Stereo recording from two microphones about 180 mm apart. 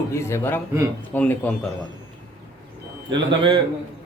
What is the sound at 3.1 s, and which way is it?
Speech, 25° right (ahead or behind).